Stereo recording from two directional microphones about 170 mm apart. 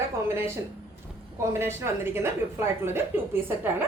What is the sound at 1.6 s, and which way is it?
A woman's voice, 15° right (ahead or behind).